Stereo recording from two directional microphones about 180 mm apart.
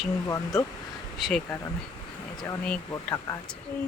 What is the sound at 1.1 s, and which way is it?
Speech, centre (ahead or behind).